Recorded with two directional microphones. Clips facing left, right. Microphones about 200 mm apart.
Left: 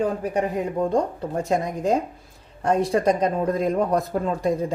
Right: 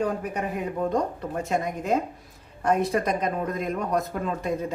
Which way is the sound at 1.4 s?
35° left (ahead or behind).